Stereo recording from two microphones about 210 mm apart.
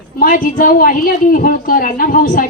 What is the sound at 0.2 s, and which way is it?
A woman's voice, 40° left (ahead or behind).